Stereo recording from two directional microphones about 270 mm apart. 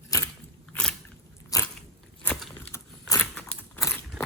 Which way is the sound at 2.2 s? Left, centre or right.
Centre.